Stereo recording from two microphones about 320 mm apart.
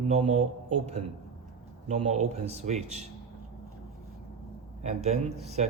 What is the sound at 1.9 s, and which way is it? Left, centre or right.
Speech, right.